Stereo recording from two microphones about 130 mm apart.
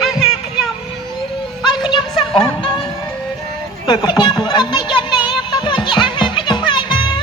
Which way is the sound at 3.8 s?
35° left (ahead or behind).